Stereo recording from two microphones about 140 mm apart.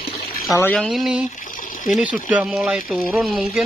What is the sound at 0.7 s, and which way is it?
Speech, centre (ahead or behind).